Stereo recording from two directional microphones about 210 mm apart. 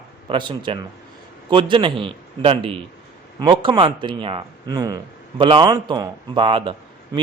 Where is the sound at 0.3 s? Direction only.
20° right (ahead or behind).